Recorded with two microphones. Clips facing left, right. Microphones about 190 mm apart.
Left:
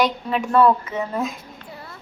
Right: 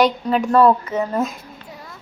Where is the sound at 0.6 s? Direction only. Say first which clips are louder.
Even; 35° right (ahead or behind).